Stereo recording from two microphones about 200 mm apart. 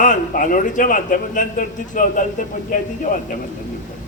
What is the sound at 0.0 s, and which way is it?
A man's voice, 40° left (ahead or behind).